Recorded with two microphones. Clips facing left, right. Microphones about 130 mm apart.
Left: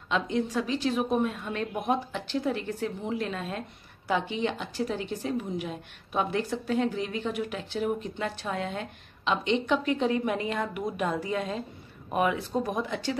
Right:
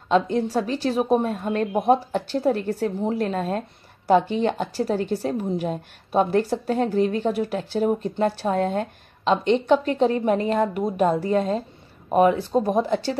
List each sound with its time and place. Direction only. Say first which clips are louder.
0.1 s a woman's voice: right 7 dB; 40° right (ahead or behind)